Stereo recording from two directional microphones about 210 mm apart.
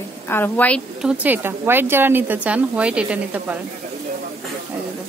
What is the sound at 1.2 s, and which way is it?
A woman's voice, 10° right (ahead or behind).